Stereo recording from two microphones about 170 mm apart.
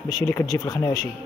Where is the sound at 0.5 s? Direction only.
20° left (ahead or behind).